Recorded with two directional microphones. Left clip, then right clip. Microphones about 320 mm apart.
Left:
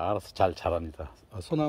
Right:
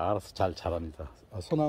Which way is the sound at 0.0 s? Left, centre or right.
Centre.